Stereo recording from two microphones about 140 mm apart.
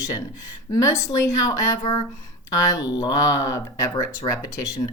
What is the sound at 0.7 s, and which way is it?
Speech, 20° left (ahead or behind).